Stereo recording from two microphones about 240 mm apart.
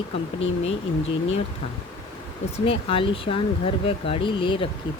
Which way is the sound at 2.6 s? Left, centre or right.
Left.